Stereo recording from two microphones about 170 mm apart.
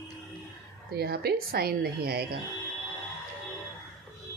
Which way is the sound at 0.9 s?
70° right (ahead or behind).